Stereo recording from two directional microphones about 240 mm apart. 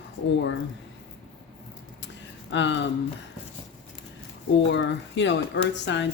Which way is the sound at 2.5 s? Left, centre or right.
Left.